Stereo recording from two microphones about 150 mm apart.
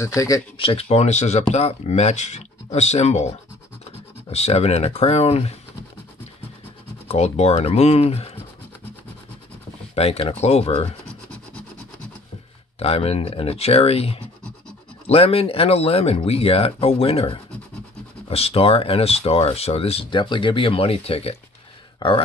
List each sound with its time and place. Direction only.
0.0 s speech: 25° left (ahead or behind)
0.6 s speech: 40° left (ahead or behind)
7.1 s speech: 45° left (ahead or behind)
9.9 s speech: 40° left (ahead or behind)
12.7 s speech: 40° left (ahead or behind)